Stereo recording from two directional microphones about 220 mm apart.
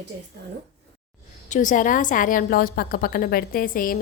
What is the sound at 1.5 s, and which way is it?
A woman's voice, 35° left (ahead or behind).